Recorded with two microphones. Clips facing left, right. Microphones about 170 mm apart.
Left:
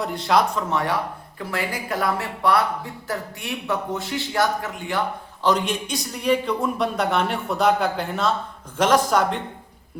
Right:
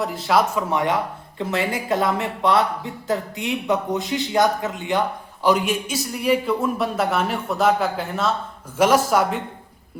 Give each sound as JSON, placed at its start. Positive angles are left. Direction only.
{"t": 0.0, "sound": "speech", "side_deg": 0}
{"t": 0.7, "sound": "speech", "side_deg": -20}